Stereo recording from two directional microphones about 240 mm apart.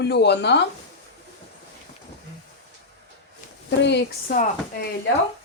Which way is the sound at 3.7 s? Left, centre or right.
Left.